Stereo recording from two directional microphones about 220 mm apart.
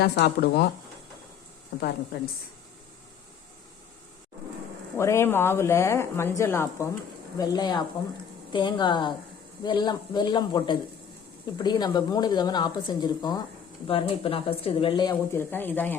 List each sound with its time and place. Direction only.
0.0 s speech: 45° left (ahead or behind)
1.7 s speech: 45° left (ahead or behind)
4.9 s speech: 10° left (ahead or behind)